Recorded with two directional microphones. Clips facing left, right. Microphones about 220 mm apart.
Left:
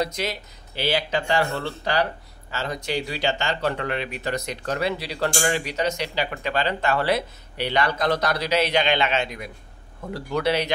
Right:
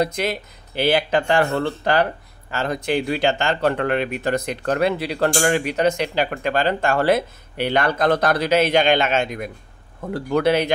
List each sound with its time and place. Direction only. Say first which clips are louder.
0.0 s speech: right 5 dB; 55° right (ahead or behind)